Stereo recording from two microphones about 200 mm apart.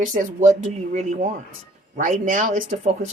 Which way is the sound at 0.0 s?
40° right (ahead or behind).